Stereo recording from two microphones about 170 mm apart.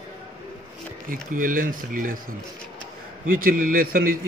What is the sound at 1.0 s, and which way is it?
A man's voice, 55° right (ahead or behind).